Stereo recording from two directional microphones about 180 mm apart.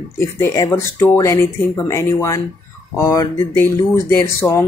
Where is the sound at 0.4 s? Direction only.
15° left (ahead or behind).